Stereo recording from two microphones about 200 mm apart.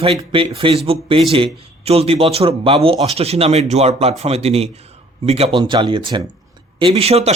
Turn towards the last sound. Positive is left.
turn(degrees=-30)  # may be behind; listen again after turning